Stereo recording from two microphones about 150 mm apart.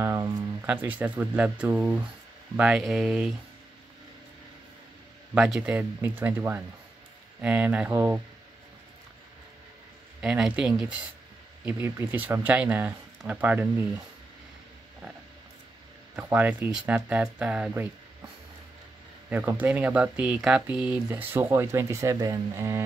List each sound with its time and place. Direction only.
0.0 s a sound: 20° right (ahead or behind)
0.6 s speech: 10° right (ahead or behind)
5.3 s speech: 5° right (ahead or behind)
10.2 s speech: 5° right (ahead or behind)
16.2 s speech: 10° right (ahead or behind)
19.6 s speech: 10° right (ahead or behind)